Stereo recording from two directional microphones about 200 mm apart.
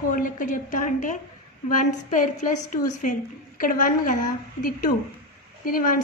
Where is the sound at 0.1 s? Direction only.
40° left (ahead or behind).